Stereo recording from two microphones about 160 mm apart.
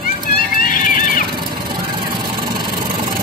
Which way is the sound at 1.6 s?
30° right (ahead or behind).